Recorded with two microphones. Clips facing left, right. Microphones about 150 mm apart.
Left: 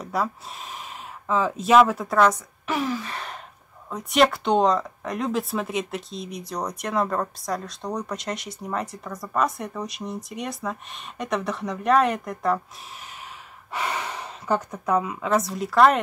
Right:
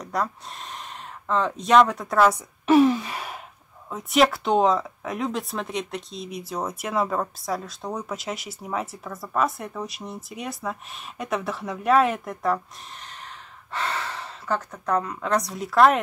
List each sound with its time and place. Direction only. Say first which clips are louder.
0.0 s speech: left 1 dB; 5° left (ahead or behind)
2.6 s speech: right 10 dB; 25° right (ahead or behind)
3.1 s gasp: right 1 dB; 10° right (ahead or behind)
3.9 s speech: even; centre (ahead or behind)
13.7 s speech: left 1 dB; 15° left (ahead or behind)